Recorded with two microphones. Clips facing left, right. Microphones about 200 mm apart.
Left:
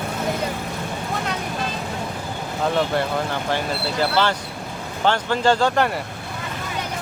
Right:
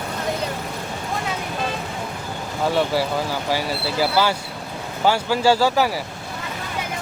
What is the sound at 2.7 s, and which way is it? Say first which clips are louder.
Speech: right 1 dB; 5° right (ahead or behind).